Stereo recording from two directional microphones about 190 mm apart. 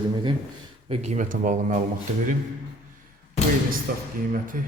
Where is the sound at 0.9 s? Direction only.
35° right (ahead or behind).